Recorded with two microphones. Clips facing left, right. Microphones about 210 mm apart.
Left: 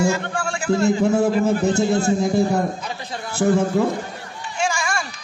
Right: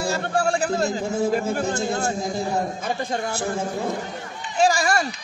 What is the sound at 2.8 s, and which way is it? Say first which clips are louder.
Speech: right 5 dB; 50° right (ahead or behind).